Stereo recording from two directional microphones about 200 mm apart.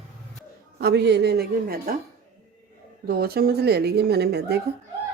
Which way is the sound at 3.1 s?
50° right (ahead or behind).